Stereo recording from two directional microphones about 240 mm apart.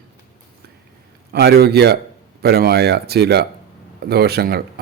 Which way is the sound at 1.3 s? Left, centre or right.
Right.